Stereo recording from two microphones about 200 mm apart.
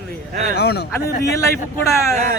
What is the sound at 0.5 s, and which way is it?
Speech, 55° left (ahead or behind).